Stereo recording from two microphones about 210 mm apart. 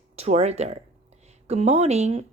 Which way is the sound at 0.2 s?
30° right (ahead or behind).